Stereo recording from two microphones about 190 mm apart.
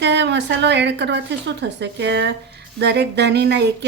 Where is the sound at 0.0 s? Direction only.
65° right (ahead or behind).